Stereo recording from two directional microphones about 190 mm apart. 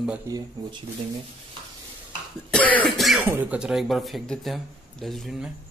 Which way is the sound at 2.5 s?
5° left (ahead or behind).